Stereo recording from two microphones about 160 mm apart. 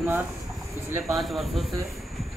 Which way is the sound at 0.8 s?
10° right (ahead or behind).